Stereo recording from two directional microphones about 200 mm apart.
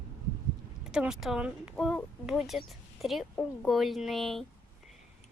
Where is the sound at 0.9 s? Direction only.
5° right (ahead or behind).